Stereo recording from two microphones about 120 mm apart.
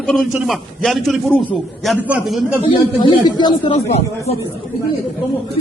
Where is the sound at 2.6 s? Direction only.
40° left (ahead or behind).